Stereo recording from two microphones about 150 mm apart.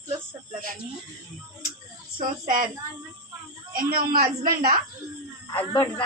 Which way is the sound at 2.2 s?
65° right (ahead or behind).